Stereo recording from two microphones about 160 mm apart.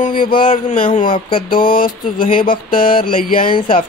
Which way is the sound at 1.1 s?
30° left (ahead or behind).